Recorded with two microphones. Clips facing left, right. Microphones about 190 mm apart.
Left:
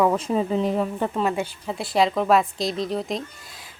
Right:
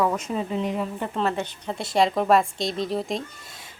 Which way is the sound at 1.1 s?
10° left (ahead or behind).